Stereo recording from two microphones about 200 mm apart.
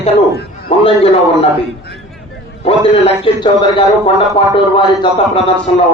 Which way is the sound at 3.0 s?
25° left (ahead or behind).